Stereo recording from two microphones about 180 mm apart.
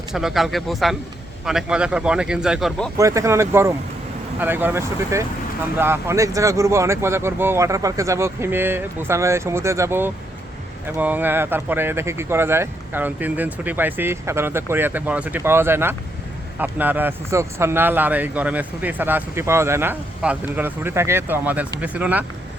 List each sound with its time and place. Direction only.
0.1 s speech: centre (ahead or behind)
3.0 s speech: 15° right (ahead or behind)